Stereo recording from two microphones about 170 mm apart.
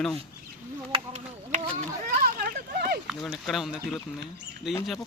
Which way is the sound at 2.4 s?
60° right (ahead or behind).